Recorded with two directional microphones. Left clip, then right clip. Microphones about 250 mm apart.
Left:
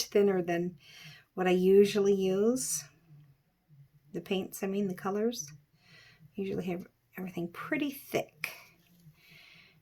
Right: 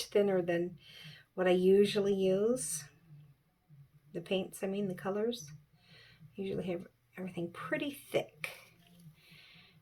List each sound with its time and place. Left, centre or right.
0.0 s speech: left
4.1 s speech: left
9.3 s a sound: left